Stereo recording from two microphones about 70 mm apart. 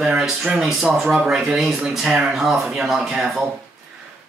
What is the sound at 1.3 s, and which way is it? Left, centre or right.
Speech, centre.